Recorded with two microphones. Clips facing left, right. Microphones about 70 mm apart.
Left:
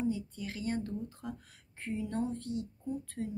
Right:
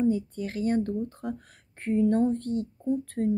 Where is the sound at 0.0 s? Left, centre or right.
Right.